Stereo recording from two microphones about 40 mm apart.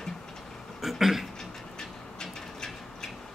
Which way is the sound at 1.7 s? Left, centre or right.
Centre.